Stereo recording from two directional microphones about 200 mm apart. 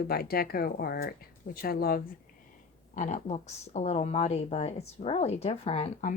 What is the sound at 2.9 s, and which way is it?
Speech, 40° left (ahead or behind).